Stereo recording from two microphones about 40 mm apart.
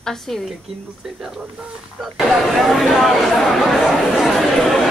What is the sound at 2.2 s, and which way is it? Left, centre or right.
A woman's voice, centre.